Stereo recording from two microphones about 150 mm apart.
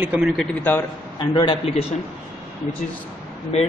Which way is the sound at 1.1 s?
30° left (ahead or behind).